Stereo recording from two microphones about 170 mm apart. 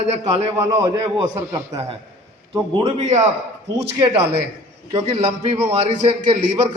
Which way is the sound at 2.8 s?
45° right (ahead or behind).